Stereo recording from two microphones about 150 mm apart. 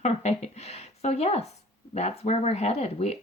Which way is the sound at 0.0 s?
45° left (ahead or behind).